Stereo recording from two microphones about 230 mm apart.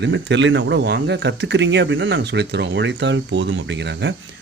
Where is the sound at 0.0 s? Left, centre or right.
Right.